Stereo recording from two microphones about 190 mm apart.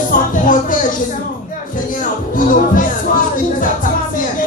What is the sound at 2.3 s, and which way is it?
Music, 45° left (ahead or behind).